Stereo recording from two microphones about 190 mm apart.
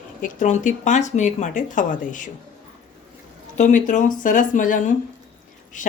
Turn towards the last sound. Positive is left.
turn(degrees=45)  # may be behind; listen again after turning